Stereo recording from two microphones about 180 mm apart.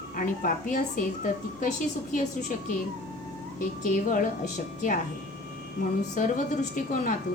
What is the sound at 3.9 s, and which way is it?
Speech, 50° left (ahead or behind).